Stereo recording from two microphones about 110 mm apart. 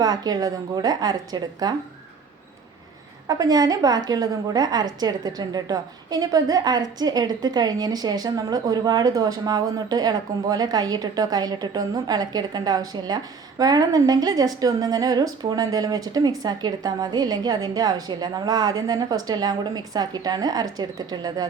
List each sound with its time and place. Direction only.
0.0 s a woman's voice: 35° right (ahead or behind)
3.2 s a woman's voice: 35° right (ahead or behind)